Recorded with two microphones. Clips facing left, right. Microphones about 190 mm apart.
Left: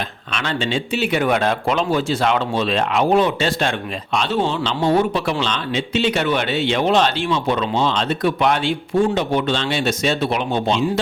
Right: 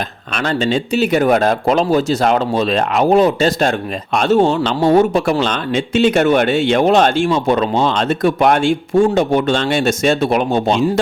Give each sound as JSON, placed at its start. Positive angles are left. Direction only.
{"t": 0.3, "sound": "speech", "side_deg": -40}